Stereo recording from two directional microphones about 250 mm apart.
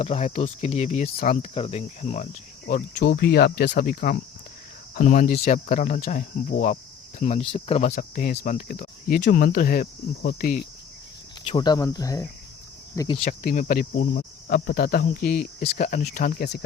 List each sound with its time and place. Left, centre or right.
0.0 s speech: left
11.4 s speech: centre; by 16.6 s left